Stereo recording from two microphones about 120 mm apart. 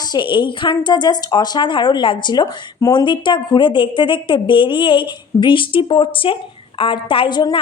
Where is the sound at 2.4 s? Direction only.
30° left (ahead or behind).